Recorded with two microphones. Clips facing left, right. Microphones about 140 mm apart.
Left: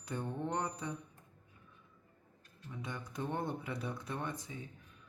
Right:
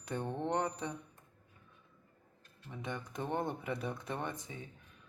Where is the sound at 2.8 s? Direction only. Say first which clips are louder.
Right 1 dB; 20° right (ahead or behind).